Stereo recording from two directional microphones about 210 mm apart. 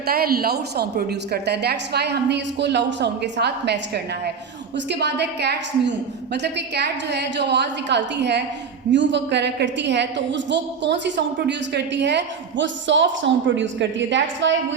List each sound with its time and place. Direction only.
0.1 s a woman's voice: 45° right (ahead or behind)